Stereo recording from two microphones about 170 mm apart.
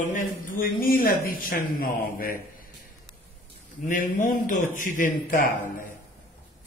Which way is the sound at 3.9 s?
55° left (ahead or behind).